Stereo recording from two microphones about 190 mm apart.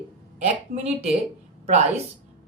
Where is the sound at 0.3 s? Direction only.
35° right (ahead or behind).